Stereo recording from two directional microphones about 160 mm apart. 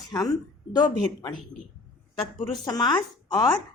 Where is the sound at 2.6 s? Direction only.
25° left (ahead or behind).